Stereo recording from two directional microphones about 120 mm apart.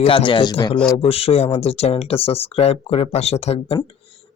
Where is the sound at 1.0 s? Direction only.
55° left (ahead or behind).